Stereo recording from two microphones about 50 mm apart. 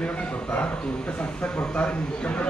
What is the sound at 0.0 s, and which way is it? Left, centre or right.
A man's voice, left.